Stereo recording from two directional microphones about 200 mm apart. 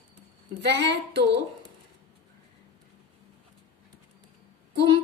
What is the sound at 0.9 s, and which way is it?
Speech, 60° right (ahead or behind).